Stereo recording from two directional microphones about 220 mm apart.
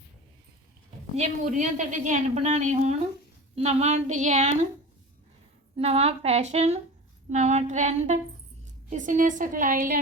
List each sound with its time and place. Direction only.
1.1 s a woman's voice: 35° right (ahead or behind)
5.7 s a woman's voice: 30° right (ahead or behind)